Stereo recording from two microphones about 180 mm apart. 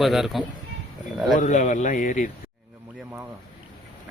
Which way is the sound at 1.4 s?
45° left (ahead or behind).